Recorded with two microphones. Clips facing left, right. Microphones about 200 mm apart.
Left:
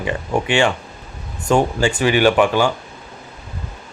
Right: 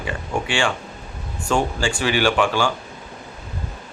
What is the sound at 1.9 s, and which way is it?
Speech, 50° left (ahead or behind).